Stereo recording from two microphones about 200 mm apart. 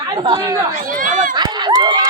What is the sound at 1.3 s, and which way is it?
Run, 20° right (ahead or behind).